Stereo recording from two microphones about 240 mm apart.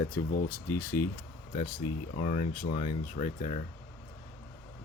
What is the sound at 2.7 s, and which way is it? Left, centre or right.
Speech, left.